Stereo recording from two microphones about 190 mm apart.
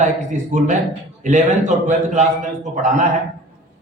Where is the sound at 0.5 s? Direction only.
40° right (ahead or behind).